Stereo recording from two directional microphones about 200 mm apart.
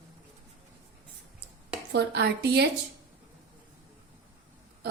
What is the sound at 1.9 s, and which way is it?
Speech, 55° right (ahead or behind).